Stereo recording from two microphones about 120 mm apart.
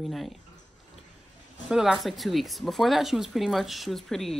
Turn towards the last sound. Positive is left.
turn(degrees=5)  # may be behind; listen again after turning